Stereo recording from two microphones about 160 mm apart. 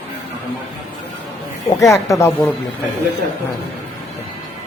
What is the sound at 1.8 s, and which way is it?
Speech, 20° left (ahead or behind).